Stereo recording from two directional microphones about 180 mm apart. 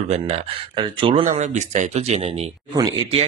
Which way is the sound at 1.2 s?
40° right (ahead or behind).